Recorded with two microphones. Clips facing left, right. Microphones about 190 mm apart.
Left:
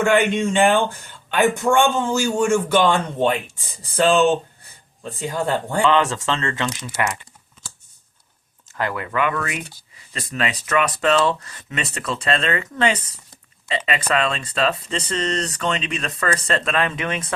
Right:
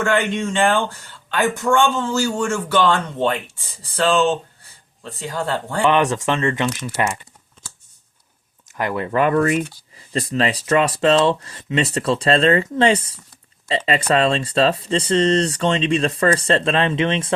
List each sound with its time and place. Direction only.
0.0 s speech: 15° left (ahead or behind)
5.8 s speech: 20° right (ahead or behind)
8.6 s a sound: 15° right (ahead or behind)
9.0 s speech: 35° right (ahead or behind)